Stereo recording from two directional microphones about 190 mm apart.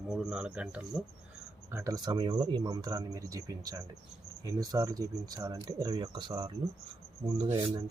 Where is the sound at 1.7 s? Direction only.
20° right (ahead or behind).